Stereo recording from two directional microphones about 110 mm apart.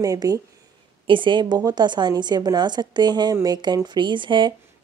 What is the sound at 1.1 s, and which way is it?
A woman's voice, 45° right (ahead or behind).